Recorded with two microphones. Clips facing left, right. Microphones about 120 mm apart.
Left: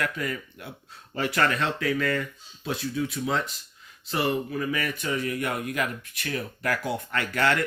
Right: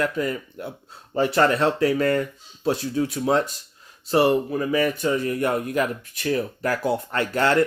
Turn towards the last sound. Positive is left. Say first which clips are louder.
# right 5 dB
turn(degrees=-30)  # may be behind; listen again after turning